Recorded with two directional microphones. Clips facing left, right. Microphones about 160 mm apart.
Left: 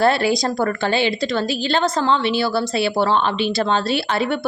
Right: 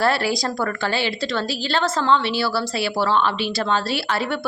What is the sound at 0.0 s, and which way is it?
A woman's voice, 20° left (ahead or behind).